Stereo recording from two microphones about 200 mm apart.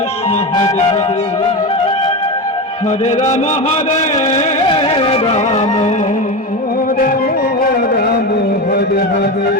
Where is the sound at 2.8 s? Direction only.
30° left (ahead or behind).